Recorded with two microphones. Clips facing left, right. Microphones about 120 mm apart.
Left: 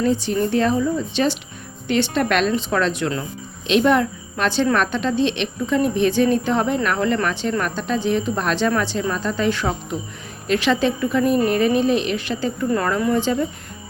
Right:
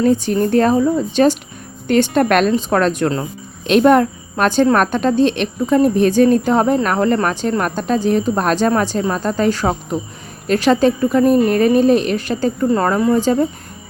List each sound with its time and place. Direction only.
0.0 s a woman's voice: 50° right (ahead or behind)